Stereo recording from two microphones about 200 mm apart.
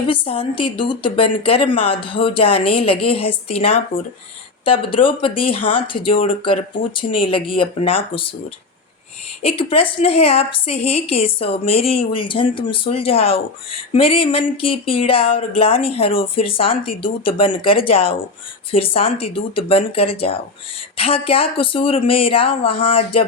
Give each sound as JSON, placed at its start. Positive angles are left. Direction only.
{"t": 0.1, "sound": "a woman's voice", "side_deg": 25}
{"t": 9.4, "sound": "a woman's voice", "side_deg": 30}